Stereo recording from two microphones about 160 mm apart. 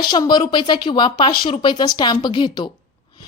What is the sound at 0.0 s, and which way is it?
A woman's voice, 25° left (ahead or behind).